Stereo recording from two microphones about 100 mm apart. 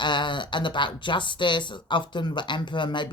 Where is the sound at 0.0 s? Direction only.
50° left (ahead or behind).